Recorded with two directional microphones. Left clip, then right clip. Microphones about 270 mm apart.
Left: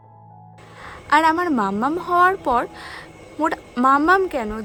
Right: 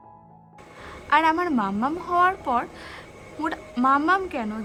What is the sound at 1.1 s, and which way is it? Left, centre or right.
A woman's voice, centre.